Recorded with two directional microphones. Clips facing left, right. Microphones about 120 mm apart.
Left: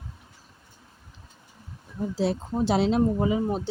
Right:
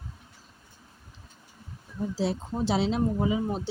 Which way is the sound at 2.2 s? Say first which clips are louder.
Left 4 dB; 55° left (ahead or behind).